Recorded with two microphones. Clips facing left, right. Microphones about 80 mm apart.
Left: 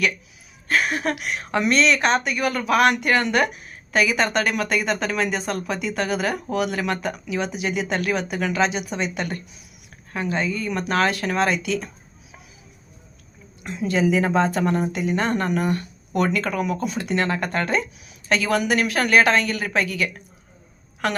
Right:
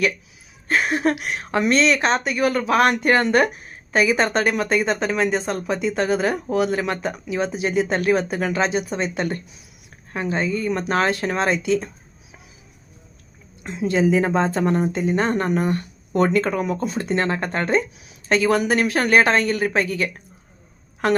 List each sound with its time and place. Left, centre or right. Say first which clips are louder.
0.7 s a woman's voice: right 2 dB; right
13.6 s a woman's voice: right 2 dB; right